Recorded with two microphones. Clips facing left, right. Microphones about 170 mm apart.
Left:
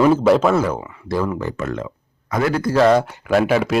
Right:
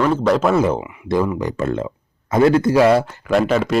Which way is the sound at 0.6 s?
15° right (ahead or behind).